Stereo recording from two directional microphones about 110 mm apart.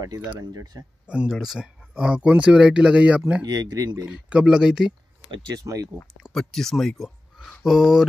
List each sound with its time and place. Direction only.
0.5 s speech: 35° right (ahead or behind)
1.0 s speech: 10° right (ahead or behind)
3.4 s speech: 35° right (ahead or behind)
4.1 s speech: 10° right (ahead or behind)
5.5 s speech: 35° right (ahead or behind)
6.1 s speech: centre (ahead or behind)